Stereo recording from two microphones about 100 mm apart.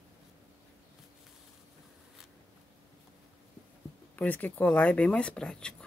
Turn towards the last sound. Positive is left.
turn(degrees=10)  # may be behind; listen again after turning